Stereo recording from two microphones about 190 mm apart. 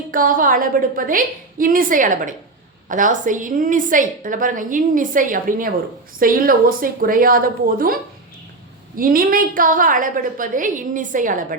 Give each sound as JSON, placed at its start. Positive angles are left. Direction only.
{"t": 0.1, "sound": "a woman's voice", "side_deg": -45}
{"t": 9.0, "sound": "a woman's voice", "side_deg": -50}